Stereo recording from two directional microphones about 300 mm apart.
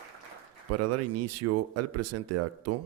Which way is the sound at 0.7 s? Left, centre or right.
Right.